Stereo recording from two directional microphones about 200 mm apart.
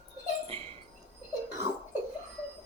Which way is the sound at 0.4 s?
30° right (ahead or behind).